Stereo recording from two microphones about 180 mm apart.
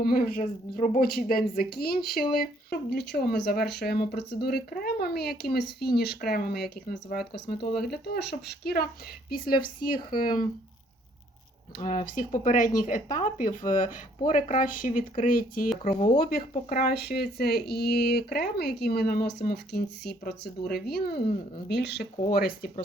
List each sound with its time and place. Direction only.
0.0 s speech: 55° left (ahead or behind)
11.8 s speech: 45° left (ahead or behind)
16.1 s speech: 55° left (ahead or behind)